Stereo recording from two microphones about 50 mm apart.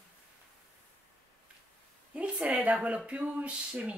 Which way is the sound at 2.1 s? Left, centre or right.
Right.